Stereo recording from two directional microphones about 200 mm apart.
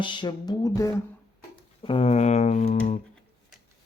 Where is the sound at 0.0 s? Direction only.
25° left (ahead or behind).